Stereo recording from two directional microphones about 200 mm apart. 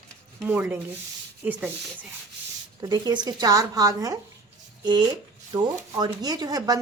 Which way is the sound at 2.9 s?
20° right (ahead or behind).